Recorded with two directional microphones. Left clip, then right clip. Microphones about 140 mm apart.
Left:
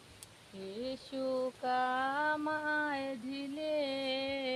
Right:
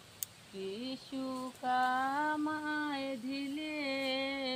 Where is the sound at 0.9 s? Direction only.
10° left (ahead or behind).